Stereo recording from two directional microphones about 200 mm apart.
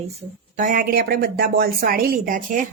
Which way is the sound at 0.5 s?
40° right (ahead or behind).